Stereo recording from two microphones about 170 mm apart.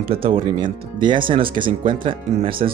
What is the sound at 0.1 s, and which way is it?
Speech, 30° right (ahead or behind).